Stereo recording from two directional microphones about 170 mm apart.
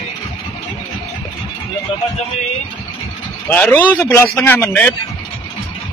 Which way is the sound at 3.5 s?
10° left (ahead or behind).